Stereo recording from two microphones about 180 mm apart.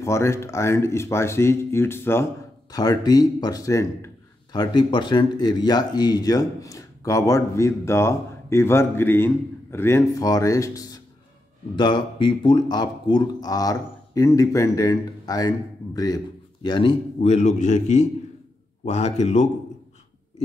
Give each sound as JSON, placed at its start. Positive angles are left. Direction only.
{"t": 0.0, "sound": "a man's voice", "side_deg": 15}